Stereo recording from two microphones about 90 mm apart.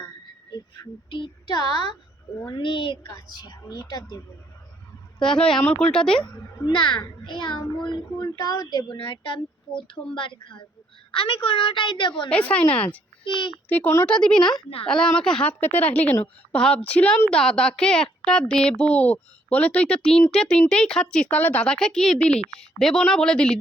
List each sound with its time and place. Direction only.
0.5 s a woman's voice: 55° left (ahead or behind)
2.5 s a child's voice: 65° left (ahead or behind)
3.2 s speech: 50° left (ahead or behind)
5.2 s speech: 5° left (ahead or behind)
6.7 s a child's voice: 60° left (ahead or behind); by 9.0 s 40° left (ahead or behind)
9.0 s a child's voice: 65° left (ahead or behind)
9.7 s speech: 5° left (ahead or behind)
10.2 s a child's voice: 65° left (ahead or behind)
11.1 s a woman's voice: 80° left; by 12.3 s 60° left (ahead or behind)
12.3 s speech: 15° left (ahead or behind)
13.2 s a child's voice: 60° left (ahead or behind)
14.1 s speech: 10° left (ahead or behind)